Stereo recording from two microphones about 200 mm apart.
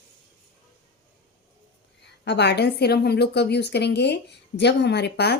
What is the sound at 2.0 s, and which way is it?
A woman's voice, 60° left (ahead or behind).